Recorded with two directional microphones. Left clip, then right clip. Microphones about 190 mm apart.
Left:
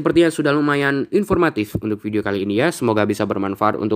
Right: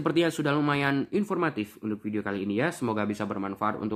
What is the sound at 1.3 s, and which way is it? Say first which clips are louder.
Speech: left 11 dB; 45° left (ahead or behind).